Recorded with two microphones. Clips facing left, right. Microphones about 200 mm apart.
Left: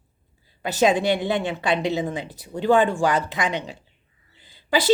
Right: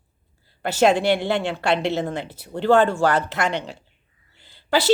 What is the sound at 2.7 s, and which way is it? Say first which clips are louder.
Speech: right 2 dB; 15° left (ahead or behind).